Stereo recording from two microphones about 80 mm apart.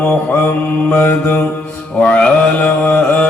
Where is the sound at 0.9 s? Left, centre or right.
Centre.